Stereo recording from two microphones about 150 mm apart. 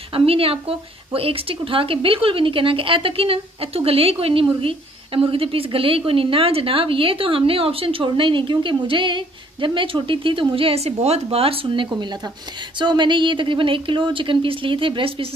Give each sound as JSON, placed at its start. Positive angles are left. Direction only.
{"t": 0.1, "sound": "a woman's voice", "side_deg": -40}